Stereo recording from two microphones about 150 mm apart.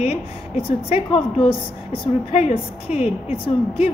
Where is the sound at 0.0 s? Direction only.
40° left (ahead or behind).